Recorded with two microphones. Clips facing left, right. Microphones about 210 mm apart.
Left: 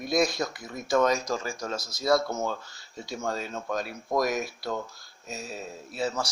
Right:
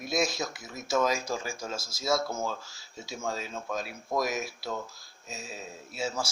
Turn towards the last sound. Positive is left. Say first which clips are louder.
# left 4 dB
turn(degrees=0)  # may be behind; listen again after turning